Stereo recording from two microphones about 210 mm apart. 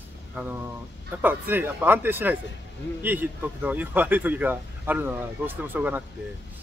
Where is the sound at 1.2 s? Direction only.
10° right (ahead or behind).